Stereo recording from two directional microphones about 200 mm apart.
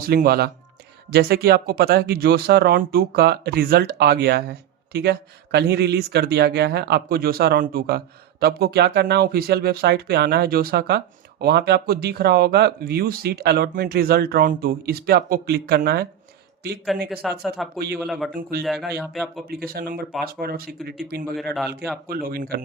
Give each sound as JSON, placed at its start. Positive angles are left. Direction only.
{"t": 0.0, "sound": "speech", "side_deg": -50}
{"t": 17.2, "sound": "speech", "side_deg": 0}
{"t": 17.7, "sound": "speech", "side_deg": -50}
{"t": 18.0, "sound": "speech", "side_deg": 0}
{"t": 19.5, "sound": "speech", "side_deg": -50}
{"t": 21.3, "sound": "speech", "side_deg": 0}
{"t": 22.0, "sound": "speech", "side_deg": -45}